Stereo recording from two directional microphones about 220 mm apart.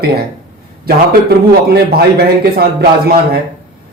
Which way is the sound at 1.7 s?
45° right (ahead or behind).